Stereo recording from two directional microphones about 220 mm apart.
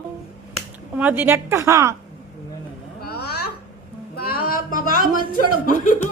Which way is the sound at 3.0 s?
45° left (ahead or behind).